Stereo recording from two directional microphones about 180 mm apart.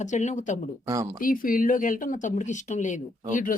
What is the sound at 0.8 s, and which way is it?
Speech, 20° right (ahead or behind).